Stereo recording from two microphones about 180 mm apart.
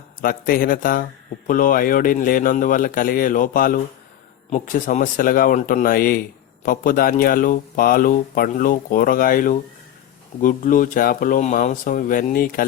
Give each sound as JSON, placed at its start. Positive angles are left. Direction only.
{"t": 0.2, "sound": "speech", "side_deg": 50}